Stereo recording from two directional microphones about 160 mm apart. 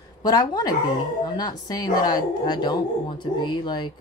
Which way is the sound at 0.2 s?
25° left (ahead or behind).